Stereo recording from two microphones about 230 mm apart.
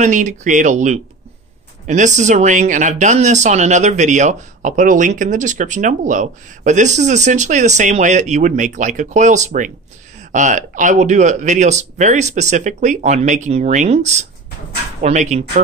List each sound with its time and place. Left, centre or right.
0.0 s speech: right